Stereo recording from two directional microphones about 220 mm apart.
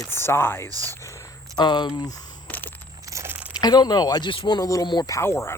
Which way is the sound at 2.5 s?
10° left (ahead or behind).